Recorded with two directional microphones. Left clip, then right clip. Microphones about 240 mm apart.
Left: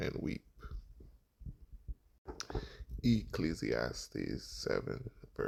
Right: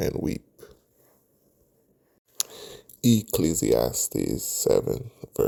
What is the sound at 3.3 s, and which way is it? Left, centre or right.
Speech, right.